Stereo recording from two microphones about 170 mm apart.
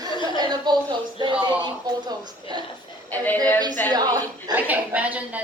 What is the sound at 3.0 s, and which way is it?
Speech, 10° left (ahead or behind).